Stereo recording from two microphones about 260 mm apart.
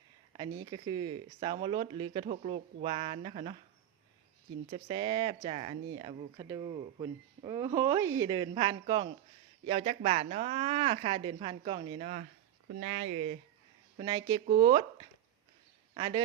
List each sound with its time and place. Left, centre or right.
0.6 s a man's voice: centre
4.7 s a man's voice: centre
16.0 s a man's voice: centre